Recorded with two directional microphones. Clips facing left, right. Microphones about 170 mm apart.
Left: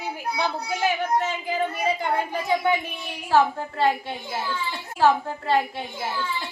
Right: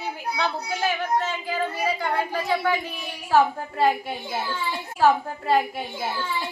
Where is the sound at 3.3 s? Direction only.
5° right (ahead or behind).